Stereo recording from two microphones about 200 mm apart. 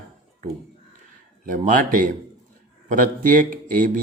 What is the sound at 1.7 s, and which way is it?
Speech, 45° right (ahead or behind).